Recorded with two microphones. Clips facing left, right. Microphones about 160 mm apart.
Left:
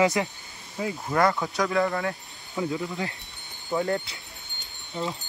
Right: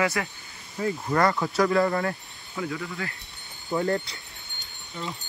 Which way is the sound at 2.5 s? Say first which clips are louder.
Left 3 dB; 25° left (ahead or behind).